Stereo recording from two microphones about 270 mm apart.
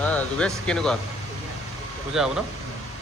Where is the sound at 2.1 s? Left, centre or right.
Centre.